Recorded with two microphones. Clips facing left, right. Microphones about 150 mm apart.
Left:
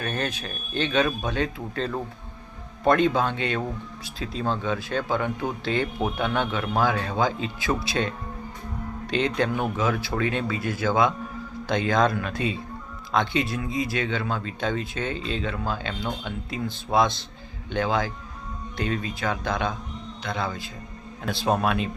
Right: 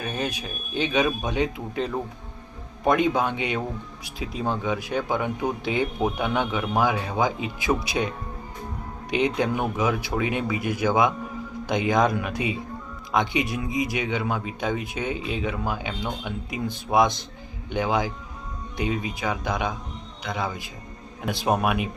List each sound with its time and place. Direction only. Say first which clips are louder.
0.0 s speech: even; 10° right (ahead or behind)